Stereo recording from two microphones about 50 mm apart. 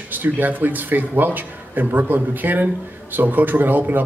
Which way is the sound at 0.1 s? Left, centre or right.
Right.